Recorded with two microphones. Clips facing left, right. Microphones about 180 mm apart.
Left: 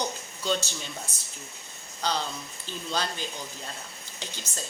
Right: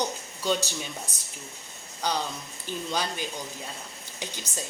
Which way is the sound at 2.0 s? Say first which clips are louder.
Right 1 dB; 15° right (ahead or behind).